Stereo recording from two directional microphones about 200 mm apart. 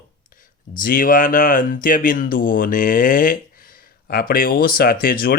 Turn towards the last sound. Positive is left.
turn(degrees=45)  # may be behind; listen again after turning